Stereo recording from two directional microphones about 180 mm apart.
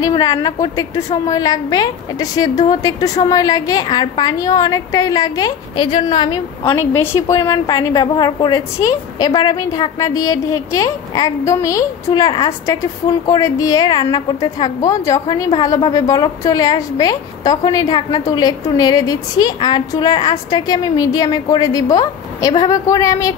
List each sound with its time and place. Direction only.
0.0 s a woman's voice: 20° left (ahead or behind)